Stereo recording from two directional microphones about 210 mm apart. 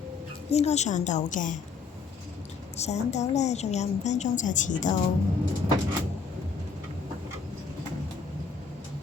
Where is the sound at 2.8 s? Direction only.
30° left (ahead or behind).